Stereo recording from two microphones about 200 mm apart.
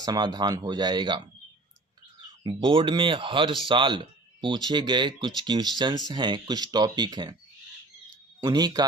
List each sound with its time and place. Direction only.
0.0 s speech: 20° right (ahead or behind)
2.4 s speech: 25° right (ahead or behind)
8.4 s speech: 20° right (ahead or behind)